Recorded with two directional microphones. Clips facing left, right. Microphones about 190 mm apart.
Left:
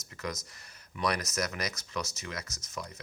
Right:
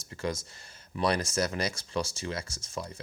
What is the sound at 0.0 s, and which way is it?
Speech, 30° right (ahead or behind).